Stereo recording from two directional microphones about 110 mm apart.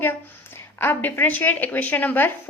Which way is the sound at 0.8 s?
20° left (ahead or behind).